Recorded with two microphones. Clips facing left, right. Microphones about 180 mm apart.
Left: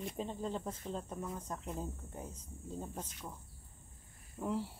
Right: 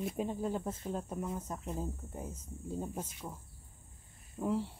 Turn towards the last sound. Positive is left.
turn(degrees=-5)  # may be behind; listen again after turning